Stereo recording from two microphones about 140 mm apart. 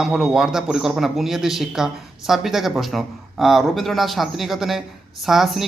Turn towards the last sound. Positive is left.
turn(degrees=0)  # may be behind; listen again after turning